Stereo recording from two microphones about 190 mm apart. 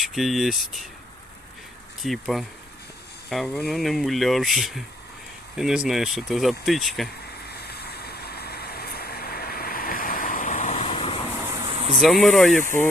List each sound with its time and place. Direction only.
0.0 s speech: centre (ahead or behind)
2.0 s speech: centre (ahead or behind)
7.4 s vehicle: 55° left (ahead or behind); by 11.2 s 30° left (ahead or behind)
11.6 s vehicle: 25° right (ahead or behind)
12.0 s speech: centre (ahead or behind)